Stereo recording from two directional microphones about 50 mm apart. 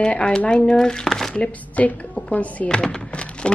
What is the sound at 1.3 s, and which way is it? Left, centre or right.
A woman's voice, left.